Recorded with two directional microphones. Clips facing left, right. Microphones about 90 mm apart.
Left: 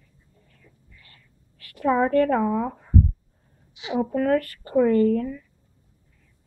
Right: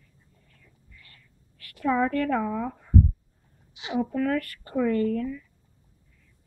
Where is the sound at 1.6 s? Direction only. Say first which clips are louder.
Left 3 dB; 30° left (ahead or behind).